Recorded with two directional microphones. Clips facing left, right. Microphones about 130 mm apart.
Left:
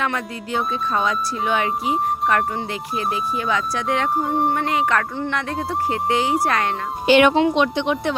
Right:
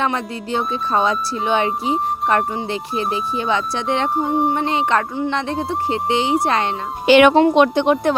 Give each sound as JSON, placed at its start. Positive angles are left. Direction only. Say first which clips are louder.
{"t": 0.0, "sound": "music", "louder": "right 3 dB", "side_deg": -30}
{"t": 4.2, "sound": "speech", "louder": "right 2 dB", "side_deg": 0}
{"t": 4.5, "sound": "music", "louder": "right 2 dB", "side_deg": -25}
{"t": 7.1, "sound": "speech", "louder": "right 3 dB", "side_deg": -75}
{"t": 7.3, "sound": "speech", "louder": "right 5 dB", "side_deg": -50}